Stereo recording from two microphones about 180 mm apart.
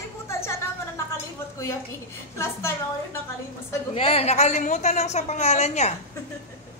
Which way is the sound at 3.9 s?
35° left (ahead or behind).